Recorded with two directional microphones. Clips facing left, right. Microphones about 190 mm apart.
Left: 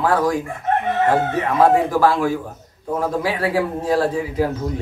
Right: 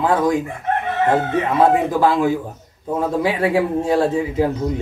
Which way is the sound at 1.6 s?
20° right (ahead or behind).